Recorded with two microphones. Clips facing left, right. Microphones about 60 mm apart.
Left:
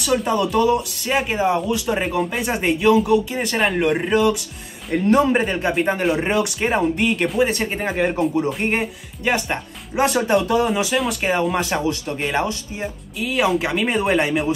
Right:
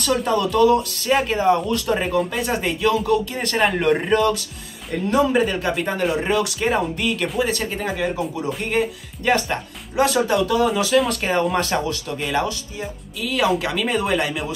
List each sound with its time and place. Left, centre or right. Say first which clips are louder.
0.0 s speech: even; centre
5.0 s speech: left 1 dB; left
5.7 s speech: left 2 dB; centre; by 8.2 s left
9.2 s speech: right 1 dB; centre
9.9 s speech: even; left
11.1 s speech: even; centre
12.4 s speech: left 1 dB; left